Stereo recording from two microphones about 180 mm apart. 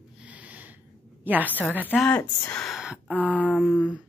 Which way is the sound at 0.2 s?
10° right (ahead or behind).